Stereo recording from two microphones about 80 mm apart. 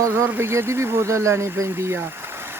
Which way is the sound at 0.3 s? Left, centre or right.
Right.